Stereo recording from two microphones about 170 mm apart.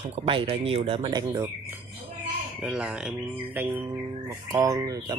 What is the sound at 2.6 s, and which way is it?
Speech, 5° right (ahead or behind).